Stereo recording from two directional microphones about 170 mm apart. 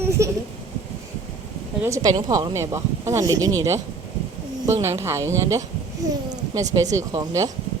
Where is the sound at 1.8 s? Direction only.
20° right (ahead or behind).